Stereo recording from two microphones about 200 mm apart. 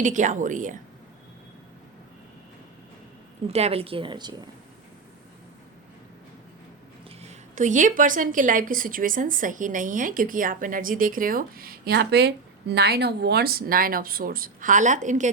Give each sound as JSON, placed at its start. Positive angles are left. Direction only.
{"t": 0.0, "sound": "a woman's voice", "side_deg": -40}
{"t": 3.4, "sound": "speech", "side_deg": -30}
{"t": 7.2, "sound": "a woman's voice", "side_deg": -40}